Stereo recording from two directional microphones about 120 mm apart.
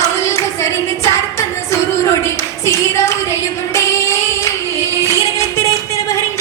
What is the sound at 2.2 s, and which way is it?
Clapping, 25° left (ahead or behind).